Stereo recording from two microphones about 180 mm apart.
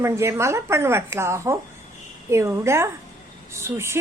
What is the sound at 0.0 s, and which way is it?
Speech, 15° right (ahead or behind).